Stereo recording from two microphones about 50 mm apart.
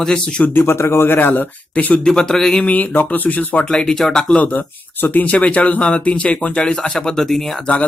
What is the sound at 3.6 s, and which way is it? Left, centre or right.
Speech, centre.